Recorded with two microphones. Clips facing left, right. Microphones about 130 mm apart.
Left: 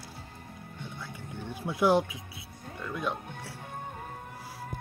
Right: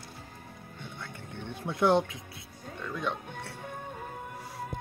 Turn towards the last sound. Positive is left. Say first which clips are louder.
# even
turn(degrees=5)  # may be behind; listen again after turning